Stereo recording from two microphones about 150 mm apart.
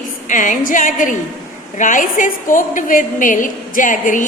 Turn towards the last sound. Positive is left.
turn(degrees=60)  # may be behind; listen again after turning